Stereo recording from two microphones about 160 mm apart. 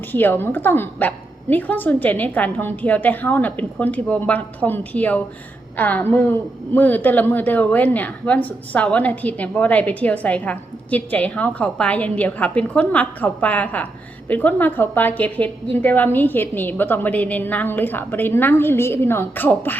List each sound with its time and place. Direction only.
0.1 s a woman's voice: 10° left (ahead or behind)